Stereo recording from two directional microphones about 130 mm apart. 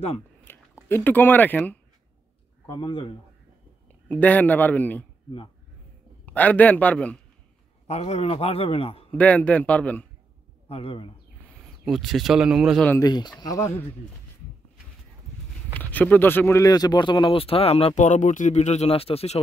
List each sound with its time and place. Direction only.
0.5 s speech: 20° left (ahead or behind)
2.6 s speech: 40° left (ahead or behind)
4.1 s a man's voice: 10° left (ahead or behind)
6.2 s a man's voice: 10° left (ahead or behind)
7.8 s a man's voice: 55° left (ahead or behind)
9.1 s a man's voice: 10° left (ahead or behind)
10.7 s a man's voice: 45° left (ahead or behind)
11.8 s speech: centre (ahead or behind)
13.0 s speech: 35° left (ahead or behind)
15.7 s a man's voice: 10° left (ahead or behind); by 19.4 s 50° left (ahead or behind)